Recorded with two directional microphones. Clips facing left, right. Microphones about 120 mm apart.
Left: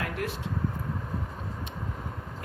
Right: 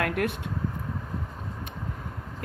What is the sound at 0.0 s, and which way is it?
Vehicle, 60° right (ahead or behind).